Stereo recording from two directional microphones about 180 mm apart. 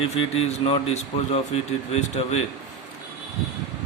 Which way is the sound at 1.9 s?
35° left (ahead or behind).